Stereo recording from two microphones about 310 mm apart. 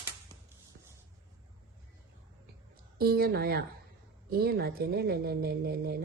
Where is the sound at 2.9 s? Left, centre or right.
Right.